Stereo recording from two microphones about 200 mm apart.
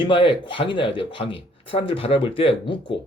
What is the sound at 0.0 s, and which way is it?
Speech, 25° left (ahead or behind).